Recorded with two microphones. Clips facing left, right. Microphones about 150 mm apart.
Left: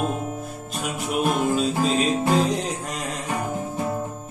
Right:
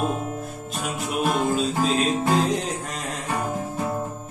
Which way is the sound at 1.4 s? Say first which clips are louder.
Left 1 dB; centre (ahead or behind).